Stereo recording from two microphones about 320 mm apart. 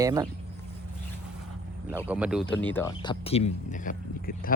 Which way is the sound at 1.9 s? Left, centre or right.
Centre.